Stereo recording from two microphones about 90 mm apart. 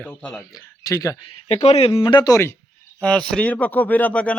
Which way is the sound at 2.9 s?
10° left (ahead or behind).